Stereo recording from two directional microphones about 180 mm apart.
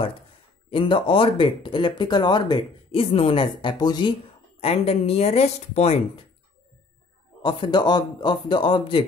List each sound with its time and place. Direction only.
0.7 s speech: 30° left (ahead or behind)
7.4 s speech: 25° left (ahead or behind)